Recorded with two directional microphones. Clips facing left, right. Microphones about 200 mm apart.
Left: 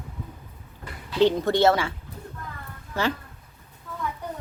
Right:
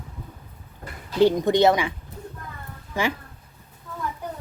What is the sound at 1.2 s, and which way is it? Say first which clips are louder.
Speech: right 2 dB; 15° right (ahead or behind).